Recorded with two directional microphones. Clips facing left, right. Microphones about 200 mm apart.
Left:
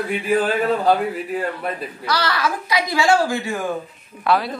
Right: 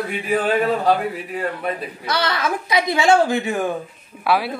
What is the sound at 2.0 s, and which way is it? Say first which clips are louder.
Speech: even; 20° right (ahead or behind).